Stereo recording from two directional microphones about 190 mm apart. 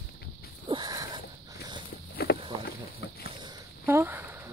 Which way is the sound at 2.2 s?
55° left (ahead or behind).